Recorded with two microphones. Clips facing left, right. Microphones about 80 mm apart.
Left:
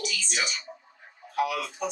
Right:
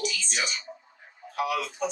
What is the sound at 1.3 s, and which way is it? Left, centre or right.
Speech, centre.